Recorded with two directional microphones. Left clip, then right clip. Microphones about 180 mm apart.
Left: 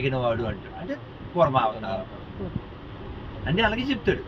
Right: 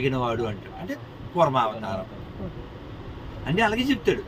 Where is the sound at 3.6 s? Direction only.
15° right (ahead or behind).